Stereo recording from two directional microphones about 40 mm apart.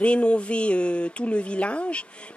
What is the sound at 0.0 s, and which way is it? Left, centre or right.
A woman's voice, left.